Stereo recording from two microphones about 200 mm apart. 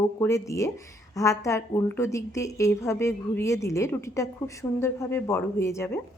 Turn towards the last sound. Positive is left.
turn(degrees=15)  # may be behind; listen again after turning